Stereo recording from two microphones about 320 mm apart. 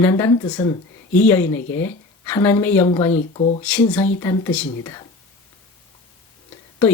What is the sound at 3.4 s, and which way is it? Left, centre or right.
Speech, centre.